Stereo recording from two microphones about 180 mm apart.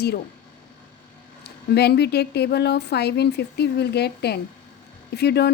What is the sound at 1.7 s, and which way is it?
Speech, 65° left (ahead or behind).